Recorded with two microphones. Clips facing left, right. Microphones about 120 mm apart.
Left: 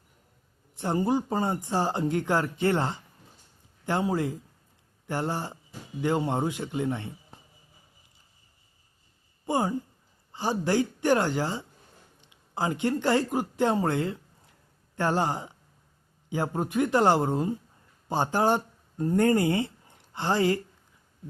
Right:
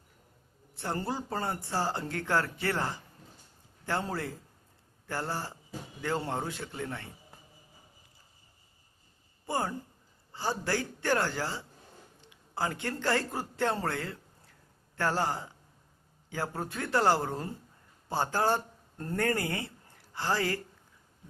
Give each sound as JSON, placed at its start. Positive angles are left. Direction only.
{"t": 0.8, "sound": "speech", "side_deg": 20}
{"t": 9.5, "sound": "a woman's voice", "side_deg": 15}